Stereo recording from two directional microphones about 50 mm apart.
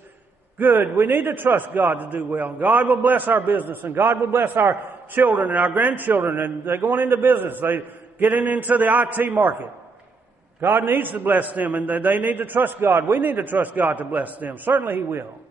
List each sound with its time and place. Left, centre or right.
0.6 s a man's voice: right
10.6 s a man's voice: right